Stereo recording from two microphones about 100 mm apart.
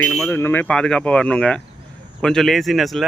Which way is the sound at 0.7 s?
10° left (ahead or behind).